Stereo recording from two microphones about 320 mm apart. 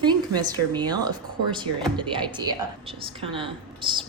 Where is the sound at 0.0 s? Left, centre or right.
Centre.